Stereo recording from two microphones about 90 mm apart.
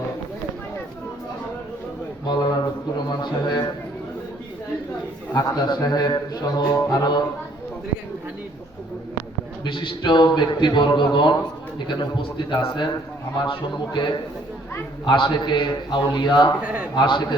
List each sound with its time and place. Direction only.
2.2 s a sound: 50° left (ahead or behind)
3.1 s speech: 50° left (ahead or behind)
5.3 s speech: 45° left (ahead or behind)
9.6 s a man's voice: 70° left (ahead or behind)
16.6 s a man's voice: 15° right (ahead or behind)
16.9 s a man's voice: 60° left (ahead or behind)